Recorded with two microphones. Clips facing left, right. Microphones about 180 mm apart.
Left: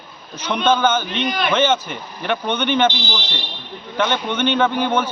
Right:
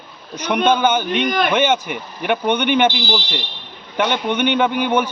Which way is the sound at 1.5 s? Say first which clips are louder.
Right 1 dB; 15° right (ahead or behind).